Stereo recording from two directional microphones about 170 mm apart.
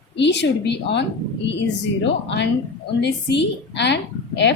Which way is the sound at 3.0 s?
90° left.